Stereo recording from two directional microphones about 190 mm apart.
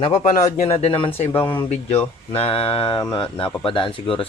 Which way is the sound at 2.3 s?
30° left (ahead or behind).